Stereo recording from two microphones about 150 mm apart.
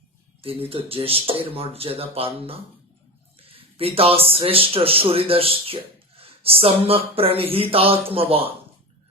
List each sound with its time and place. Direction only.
0.4 s speech: 40° right (ahead or behind)